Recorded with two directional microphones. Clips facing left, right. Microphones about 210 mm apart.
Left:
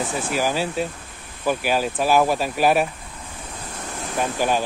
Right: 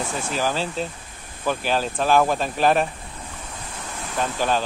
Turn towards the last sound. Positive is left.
turn(degrees=10)  # may be behind; listen again after turning